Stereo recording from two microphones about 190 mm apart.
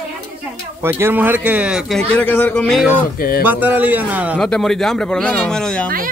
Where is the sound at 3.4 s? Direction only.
10° right (ahead or behind).